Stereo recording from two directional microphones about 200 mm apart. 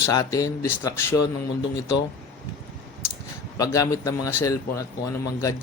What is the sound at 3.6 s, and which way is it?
Speech, 15° left (ahead or behind).